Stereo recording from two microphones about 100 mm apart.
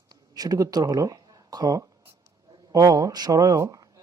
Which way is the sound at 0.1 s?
40° right (ahead or behind).